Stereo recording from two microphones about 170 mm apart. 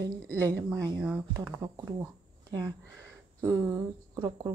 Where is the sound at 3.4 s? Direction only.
20° right (ahead or behind).